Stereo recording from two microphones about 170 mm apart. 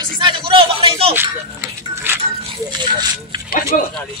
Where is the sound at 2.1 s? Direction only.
15° right (ahead or behind).